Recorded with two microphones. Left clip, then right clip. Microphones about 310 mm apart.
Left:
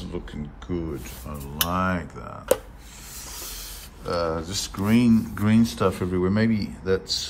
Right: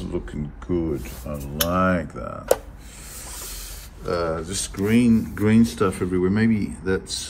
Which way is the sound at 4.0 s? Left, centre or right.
Centre.